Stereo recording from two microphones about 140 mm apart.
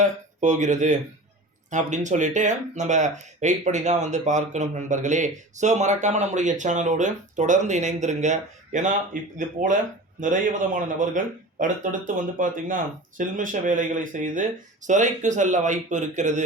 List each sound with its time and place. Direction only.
0.0 s speech: 60° right (ahead or behind)
10.2 s speech: 65° right (ahead or behind)